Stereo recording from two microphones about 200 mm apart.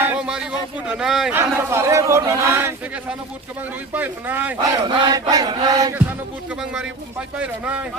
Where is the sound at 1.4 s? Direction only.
15° right (ahead or behind).